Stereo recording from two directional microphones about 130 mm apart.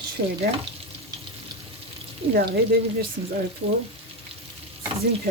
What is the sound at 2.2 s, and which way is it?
Speech, 50° right (ahead or behind).